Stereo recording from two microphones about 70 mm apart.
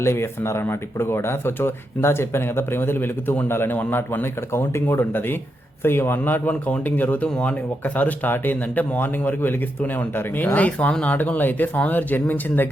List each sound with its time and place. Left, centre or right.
0.0 s speech: left